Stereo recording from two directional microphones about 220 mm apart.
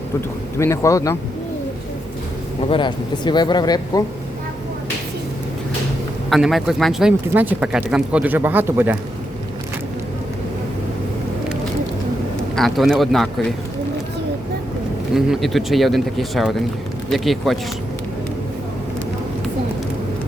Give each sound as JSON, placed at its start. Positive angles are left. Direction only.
{"t": 0.6, "sound": "speech", "side_deg": 15}
{"t": 2.6, "sound": "speech", "side_deg": 20}
{"t": 6.3, "sound": "speech", "side_deg": 0}
{"t": 12.5, "sound": "speech", "side_deg": 0}
{"t": 15.1, "sound": "speech", "side_deg": 0}